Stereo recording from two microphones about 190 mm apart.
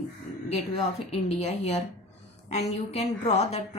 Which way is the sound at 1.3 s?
35° left (ahead or behind).